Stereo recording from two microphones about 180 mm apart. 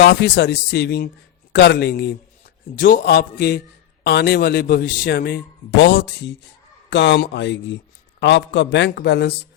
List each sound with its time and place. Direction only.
0.0 s a man's voice: 70° left (ahead or behind)
2.7 s a man's voice: 50° left (ahead or behind)
4.0 s a man's voice: 65° left (ahead or behind)